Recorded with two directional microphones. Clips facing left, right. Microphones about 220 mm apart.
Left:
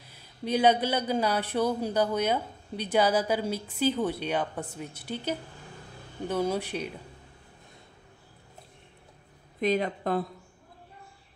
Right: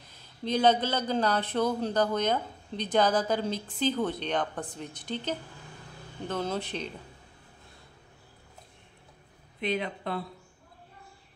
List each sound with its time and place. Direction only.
0.1 s a man's voice: 10° left (ahead or behind)
9.6 s speech: 45° left (ahead or behind)